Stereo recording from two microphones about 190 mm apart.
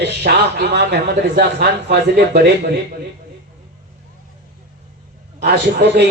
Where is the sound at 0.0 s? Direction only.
60° right (ahead or behind).